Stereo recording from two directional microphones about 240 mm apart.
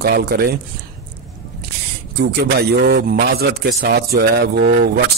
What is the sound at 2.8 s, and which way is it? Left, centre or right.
Speech, right.